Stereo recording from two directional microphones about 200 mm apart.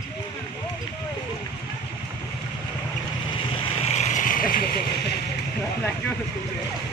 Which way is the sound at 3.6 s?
35° left (ahead or behind).